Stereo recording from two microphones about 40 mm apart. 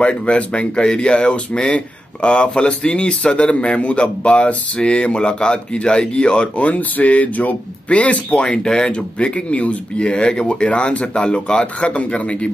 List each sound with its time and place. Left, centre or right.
0.0 s speech: left
6.6 s speech: left
8.5 s speech: centre